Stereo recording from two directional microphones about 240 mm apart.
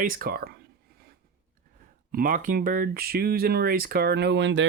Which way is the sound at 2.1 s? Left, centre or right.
Right.